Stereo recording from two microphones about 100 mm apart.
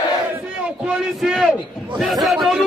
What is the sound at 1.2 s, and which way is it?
A man's voice, centre (ahead or behind).